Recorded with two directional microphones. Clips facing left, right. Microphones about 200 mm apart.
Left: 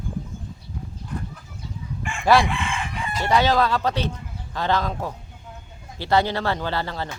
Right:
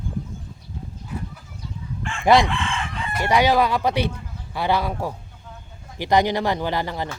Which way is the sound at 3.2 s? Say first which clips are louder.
Right 1 dB; 15° right (ahead or behind).